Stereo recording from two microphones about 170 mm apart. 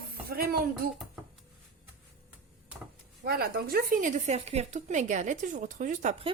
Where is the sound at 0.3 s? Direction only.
65° right (ahead or behind).